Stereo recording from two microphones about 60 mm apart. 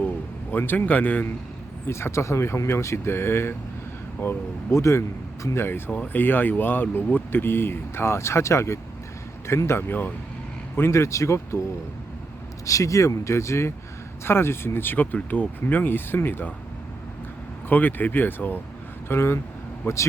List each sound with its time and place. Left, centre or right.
0.5 s speech: left
1.9 s speech: left
4.8 s speech: left
5.9 s speech: left
9.6 s speech: left
10.8 s speech: left
12.6 s speech: left
17.7 s speech: left